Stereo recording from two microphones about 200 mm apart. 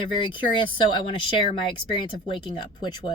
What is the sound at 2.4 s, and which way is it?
Speech, 20° left (ahead or behind).